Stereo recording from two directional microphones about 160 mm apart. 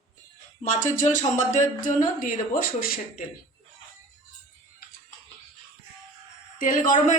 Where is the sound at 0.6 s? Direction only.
50° left (ahead or behind).